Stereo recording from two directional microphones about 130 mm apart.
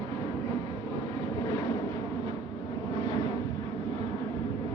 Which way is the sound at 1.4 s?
30° left (ahead or behind).